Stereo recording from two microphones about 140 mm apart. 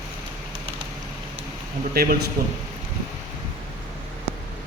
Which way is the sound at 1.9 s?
90° right.